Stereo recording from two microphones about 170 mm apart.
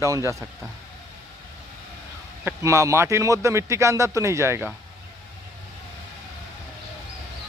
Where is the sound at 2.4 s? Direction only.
15° right (ahead or behind).